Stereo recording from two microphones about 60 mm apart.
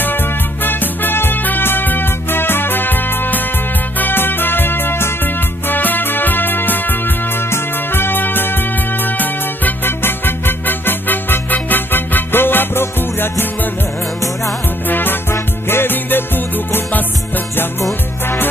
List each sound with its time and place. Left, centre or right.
0.7 s music: left
14.9 s music: left